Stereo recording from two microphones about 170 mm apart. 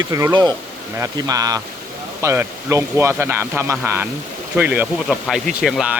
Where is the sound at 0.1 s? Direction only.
20° right (ahead or behind).